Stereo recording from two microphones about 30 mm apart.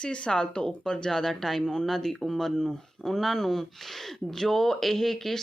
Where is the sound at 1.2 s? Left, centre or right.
Centre.